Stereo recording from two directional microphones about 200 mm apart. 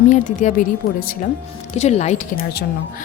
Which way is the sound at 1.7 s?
35° left (ahead or behind).